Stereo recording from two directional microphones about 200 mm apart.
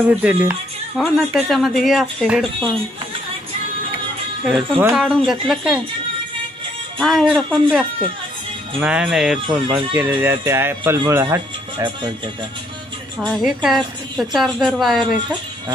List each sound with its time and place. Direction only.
0.2 s a woman's voice: 10° right (ahead or behind)
4.5 s a woman's voice: 10° right (ahead or behind)
7.0 s a woman's voice: centre (ahead or behind); by 12.1 s 20° right (ahead or behind)
13.2 s a woman's voice: centre (ahead or behind)